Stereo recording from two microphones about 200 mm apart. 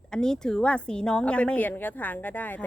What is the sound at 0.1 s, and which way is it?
A woman's voice, 5° left (ahead or behind).